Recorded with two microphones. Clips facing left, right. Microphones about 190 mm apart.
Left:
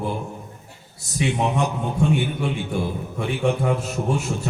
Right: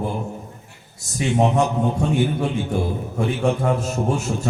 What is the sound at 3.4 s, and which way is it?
Speech, 40° right (ahead or behind).